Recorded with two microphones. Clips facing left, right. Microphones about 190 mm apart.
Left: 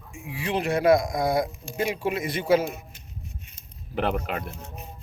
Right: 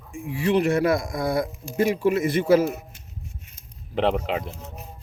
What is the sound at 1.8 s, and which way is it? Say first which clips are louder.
Speech: right 6 dB; 50° right (ahead or behind).